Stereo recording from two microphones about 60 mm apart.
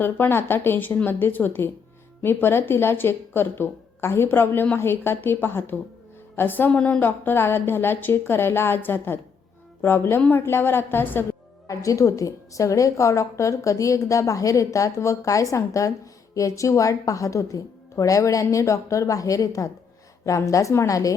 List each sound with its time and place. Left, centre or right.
0.0 s speech: left
6.7 s a woman's voice: left
7.0 s speech: left
11.7 s a woman's voice: left